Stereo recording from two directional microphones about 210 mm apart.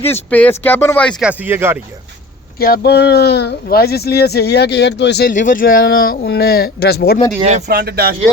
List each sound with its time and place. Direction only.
0.0 s speech: 10° left (ahead or behind)
1.2 s speech: 10° right (ahead or behind)
2.6 s speech: 45° left (ahead or behind)
5.3 s speech: 40° left (ahead or behind)
7.4 s speech: 40° right (ahead or behind)